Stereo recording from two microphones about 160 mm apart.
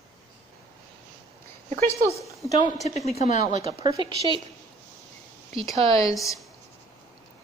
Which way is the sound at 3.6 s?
40° right (ahead or behind).